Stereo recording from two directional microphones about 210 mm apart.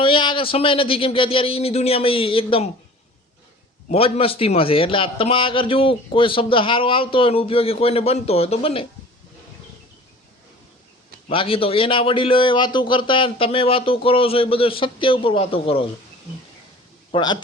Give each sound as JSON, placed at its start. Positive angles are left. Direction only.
{"t": 0.0, "sound": "a man's voice", "side_deg": 25}
{"t": 3.8, "sound": "a man's voice", "side_deg": 30}
{"t": 11.3, "sound": "a man's voice", "side_deg": 25}
{"t": 17.1, "sound": "speech", "side_deg": 20}